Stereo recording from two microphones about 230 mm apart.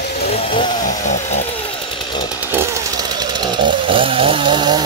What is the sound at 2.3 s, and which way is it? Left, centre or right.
Chainsaw, centre.